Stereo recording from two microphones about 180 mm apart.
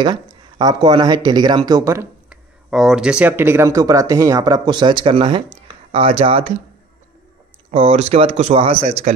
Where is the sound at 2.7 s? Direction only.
Centre (ahead or behind); by 6.4 s 30° right (ahead or behind).